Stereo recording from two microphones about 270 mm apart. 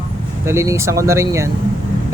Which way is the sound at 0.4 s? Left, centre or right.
Centre.